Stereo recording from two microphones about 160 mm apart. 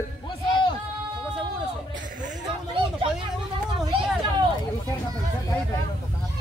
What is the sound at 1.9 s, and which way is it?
Chatter, 55° right (ahead or behind).